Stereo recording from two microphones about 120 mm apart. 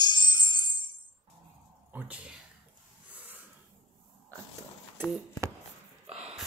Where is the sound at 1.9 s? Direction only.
15° right (ahead or behind).